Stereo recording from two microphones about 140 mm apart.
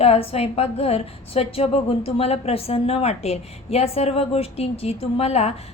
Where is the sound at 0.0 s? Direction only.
45° left (ahead or behind).